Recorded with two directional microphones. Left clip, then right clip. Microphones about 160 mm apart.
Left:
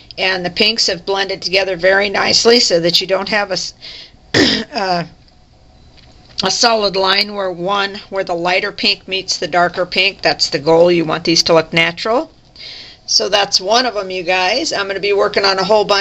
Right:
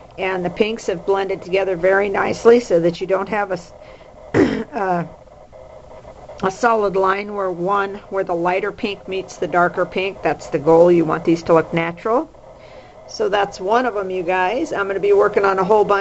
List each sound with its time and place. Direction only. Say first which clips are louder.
0.2 s speech: left 5 dB; 20° left (ahead or behind)
4.6 s throat clearing: left 3 dB; 30° left (ahead or behind)
6.4 s speech: left 3 dB; 15° left (ahead or behind)
13.2 s speech: left 2 dB; 15° left (ahead or behind)